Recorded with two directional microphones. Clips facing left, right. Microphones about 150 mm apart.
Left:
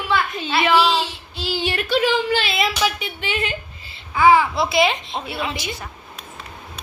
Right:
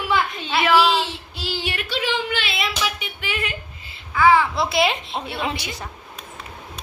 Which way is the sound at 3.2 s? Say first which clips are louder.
Left 3 dB; 25° left (ahead or behind).